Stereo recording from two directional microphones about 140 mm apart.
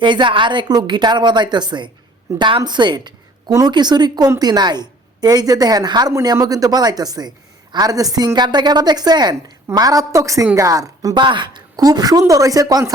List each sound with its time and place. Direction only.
0.0 s a woman's voice: 35° right (ahead or behind)